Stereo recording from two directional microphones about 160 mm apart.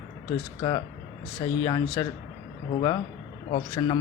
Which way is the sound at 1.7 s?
25° left (ahead or behind).